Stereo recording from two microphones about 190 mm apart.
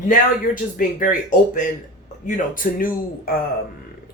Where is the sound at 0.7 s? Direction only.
45° left (ahead or behind).